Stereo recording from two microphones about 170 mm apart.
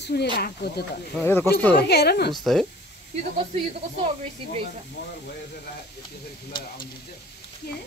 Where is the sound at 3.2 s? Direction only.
45° right (ahead or behind).